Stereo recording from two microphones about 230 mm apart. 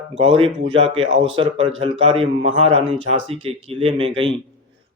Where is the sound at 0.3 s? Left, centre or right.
Right.